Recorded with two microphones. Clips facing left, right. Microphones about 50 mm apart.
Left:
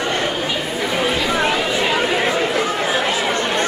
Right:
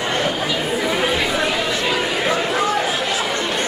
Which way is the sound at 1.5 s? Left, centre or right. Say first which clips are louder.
Left 2 dB; centre.